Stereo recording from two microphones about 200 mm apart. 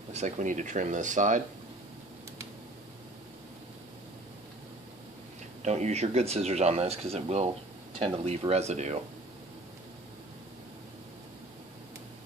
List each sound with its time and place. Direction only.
0.1 s speech: 35° right (ahead or behind)
5.6 s speech: 35° right (ahead or behind)